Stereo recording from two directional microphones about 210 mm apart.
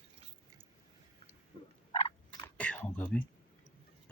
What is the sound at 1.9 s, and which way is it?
Frog, 25° left (ahead or behind).